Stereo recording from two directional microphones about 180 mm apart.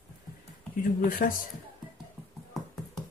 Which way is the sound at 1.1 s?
50° left (ahead or behind).